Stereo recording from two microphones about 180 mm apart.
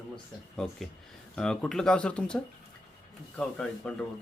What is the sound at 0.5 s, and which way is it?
Speech, 5° left (ahead or behind).